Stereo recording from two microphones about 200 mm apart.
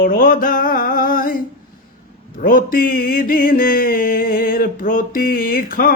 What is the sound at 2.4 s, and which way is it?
Mantra, 45° left (ahead or behind).